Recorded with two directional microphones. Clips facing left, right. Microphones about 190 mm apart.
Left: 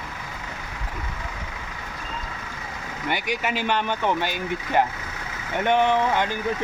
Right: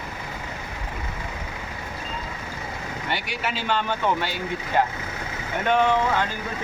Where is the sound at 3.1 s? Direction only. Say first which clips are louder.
Left 4 dB; 15° left (ahead or behind).